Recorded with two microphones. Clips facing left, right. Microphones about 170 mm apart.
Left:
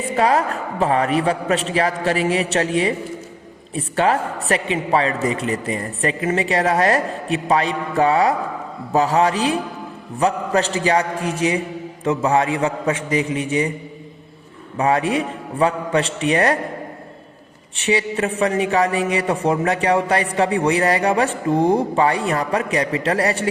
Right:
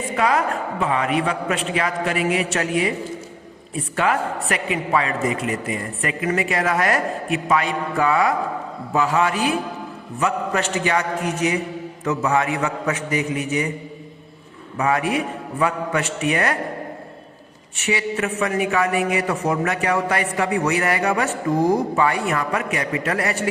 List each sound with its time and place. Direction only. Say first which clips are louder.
0.2 s a man's voice: left 2 dB; 35° left (ahead or behind)
3.9 s a man's voice: left 3 dB; 30° left (ahead or behind)
14.8 s a man's voice: left 2 dB; 30° left (ahead or behind)
17.8 s a man's voice: left 3 dB; 30° left (ahead or behind)